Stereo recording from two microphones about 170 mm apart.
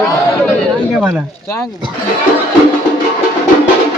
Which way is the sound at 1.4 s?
15° left (ahead or behind).